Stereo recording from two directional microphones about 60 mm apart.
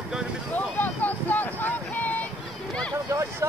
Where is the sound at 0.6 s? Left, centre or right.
Left.